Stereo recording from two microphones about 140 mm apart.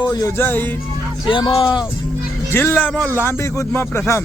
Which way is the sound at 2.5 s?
15° left (ahead or behind).